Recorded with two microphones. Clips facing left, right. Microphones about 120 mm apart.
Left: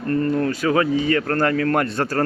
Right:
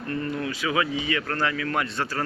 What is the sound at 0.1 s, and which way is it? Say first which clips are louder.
Speech: left 9 dB; 45° left (ahead or behind).